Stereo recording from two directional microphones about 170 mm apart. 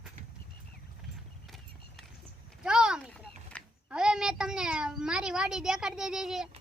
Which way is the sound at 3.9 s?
5° right (ahead or behind).